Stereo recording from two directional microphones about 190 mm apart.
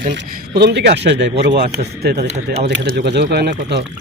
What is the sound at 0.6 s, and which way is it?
Speech, 60° right (ahead or behind).